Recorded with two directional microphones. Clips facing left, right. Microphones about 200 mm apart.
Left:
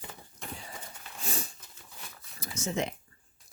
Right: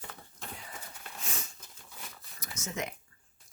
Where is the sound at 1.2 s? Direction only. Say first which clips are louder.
Left 7 dB; 35° left (ahead or behind).